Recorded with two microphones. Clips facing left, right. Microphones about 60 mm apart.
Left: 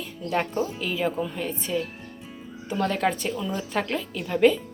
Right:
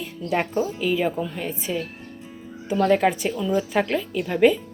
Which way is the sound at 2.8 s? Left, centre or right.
Centre.